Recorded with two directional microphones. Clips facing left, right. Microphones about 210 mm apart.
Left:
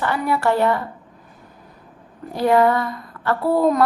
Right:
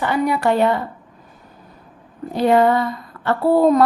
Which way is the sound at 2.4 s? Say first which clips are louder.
Right 2 dB; 20° right (ahead or behind).